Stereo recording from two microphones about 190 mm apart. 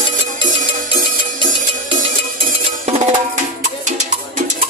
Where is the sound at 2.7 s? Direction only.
35° right (ahead or behind).